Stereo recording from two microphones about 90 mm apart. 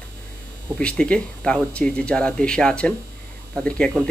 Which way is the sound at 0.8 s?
10° left (ahead or behind).